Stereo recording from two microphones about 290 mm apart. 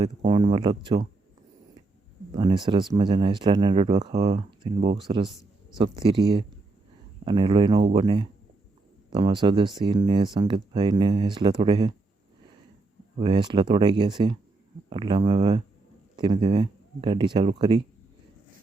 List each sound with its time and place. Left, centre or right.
0.0 s speech: centre
2.3 s speech: centre
13.1 s speech: centre